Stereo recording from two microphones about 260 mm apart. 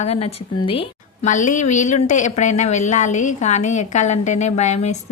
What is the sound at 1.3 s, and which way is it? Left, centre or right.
A woman's voice, left.